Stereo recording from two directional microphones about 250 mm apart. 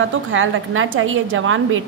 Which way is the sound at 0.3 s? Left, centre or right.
Right.